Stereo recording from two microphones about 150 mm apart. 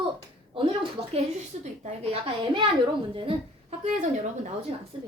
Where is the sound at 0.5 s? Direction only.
35° right (ahead or behind).